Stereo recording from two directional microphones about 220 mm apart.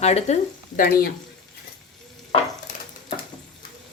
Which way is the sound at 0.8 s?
40° left (ahead or behind).